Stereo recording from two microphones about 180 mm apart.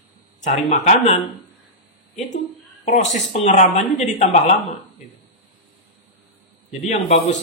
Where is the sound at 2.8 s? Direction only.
40° left (ahead or behind).